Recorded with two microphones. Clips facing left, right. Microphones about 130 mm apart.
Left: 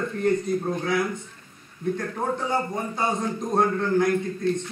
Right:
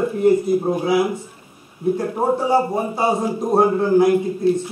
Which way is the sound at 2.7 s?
10° right (ahead or behind).